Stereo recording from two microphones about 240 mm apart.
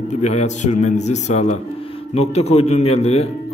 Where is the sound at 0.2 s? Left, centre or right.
Left.